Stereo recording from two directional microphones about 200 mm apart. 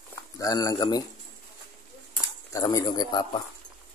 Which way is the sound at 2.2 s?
20° left (ahead or behind).